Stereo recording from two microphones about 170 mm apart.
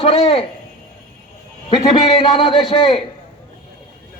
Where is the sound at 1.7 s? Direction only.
30° left (ahead or behind).